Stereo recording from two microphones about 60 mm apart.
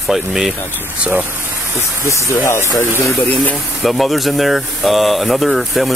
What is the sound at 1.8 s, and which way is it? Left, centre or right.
Speech, left.